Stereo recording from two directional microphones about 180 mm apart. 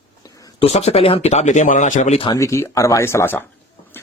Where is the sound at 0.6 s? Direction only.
35° left (ahead or behind).